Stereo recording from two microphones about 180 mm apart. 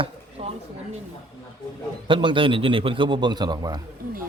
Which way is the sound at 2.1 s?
30° right (ahead or behind).